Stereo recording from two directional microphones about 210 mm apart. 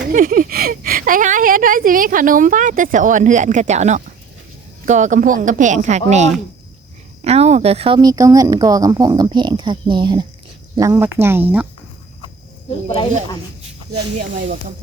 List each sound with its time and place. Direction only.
0.0 s a woman's voice: 40° right (ahead or behind); by 11.6 s 10° right (ahead or behind)